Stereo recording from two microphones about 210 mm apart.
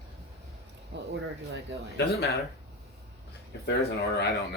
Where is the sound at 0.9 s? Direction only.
55° right (ahead or behind).